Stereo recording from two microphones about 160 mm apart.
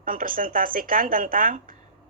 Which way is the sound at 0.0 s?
60° right (ahead or behind).